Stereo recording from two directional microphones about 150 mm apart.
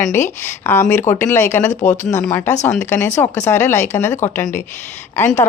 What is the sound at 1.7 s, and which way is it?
Speech, 55° left (ahead or behind).